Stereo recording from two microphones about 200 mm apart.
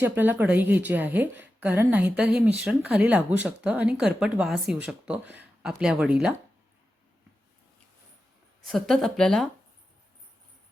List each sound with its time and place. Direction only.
0.0 s a woman's voice: 10° right (ahead or behind)
8.6 s speech: centre (ahead or behind)